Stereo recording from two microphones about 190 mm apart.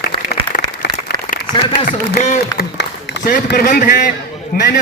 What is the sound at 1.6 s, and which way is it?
Speech, 25° left (ahead or behind).